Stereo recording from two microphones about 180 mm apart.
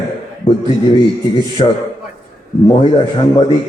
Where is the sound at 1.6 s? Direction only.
30° left (ahead or behind).